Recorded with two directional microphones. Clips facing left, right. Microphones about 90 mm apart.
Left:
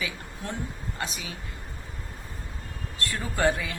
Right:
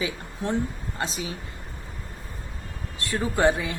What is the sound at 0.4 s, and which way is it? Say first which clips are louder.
Speech: right 8 dB; 30° right (ahead or behind).